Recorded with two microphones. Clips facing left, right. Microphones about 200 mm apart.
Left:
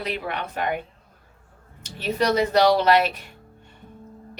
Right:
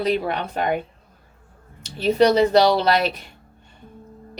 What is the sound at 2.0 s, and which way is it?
Speech, 35° right (ahead or behind).